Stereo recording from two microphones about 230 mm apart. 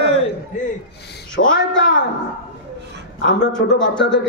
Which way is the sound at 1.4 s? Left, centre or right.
Left.